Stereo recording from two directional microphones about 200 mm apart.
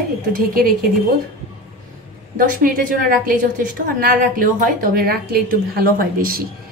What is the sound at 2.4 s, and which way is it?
A woman's voice, 45° right (ahead or behind).